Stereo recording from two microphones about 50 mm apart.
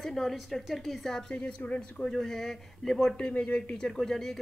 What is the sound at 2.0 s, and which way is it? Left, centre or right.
A woman's voice, centre.